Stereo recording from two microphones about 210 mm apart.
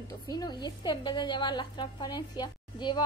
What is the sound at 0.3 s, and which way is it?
A woman's voice, 20° left (ahead or behind).